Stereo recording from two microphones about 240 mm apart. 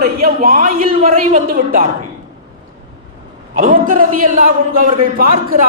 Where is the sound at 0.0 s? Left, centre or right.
Right.